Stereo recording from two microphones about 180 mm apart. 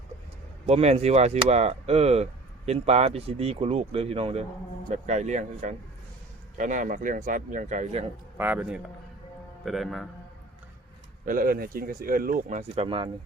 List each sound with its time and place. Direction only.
0.7 s speech: 35° right (ahead or behind)
8.4 s a man's voice: 10° right (ahead or behind)
11.3 s speech: 50° right (ahead or behind); by 13.1 s 30° right (ahead or behind)